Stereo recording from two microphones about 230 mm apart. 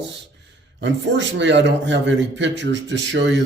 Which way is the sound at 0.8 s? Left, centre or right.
Right.